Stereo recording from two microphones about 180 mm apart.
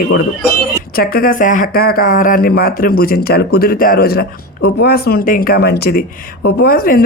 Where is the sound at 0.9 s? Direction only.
55° left (ahead or behind).